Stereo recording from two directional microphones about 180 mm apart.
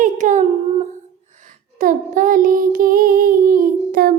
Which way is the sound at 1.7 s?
50° right (ahead or behind).